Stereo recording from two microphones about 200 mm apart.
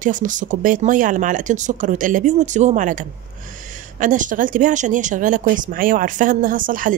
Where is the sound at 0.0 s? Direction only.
40° right (ahead or behind).